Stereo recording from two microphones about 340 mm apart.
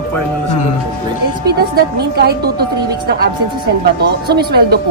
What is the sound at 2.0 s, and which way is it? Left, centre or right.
Speech, right.